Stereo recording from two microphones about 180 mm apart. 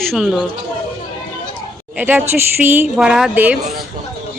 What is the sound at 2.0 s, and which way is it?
A woman's voice, 10° right (ahead or behind).